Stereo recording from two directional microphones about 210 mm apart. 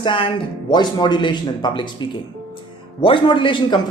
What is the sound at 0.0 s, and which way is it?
Speech, 25° left (ahead or behind).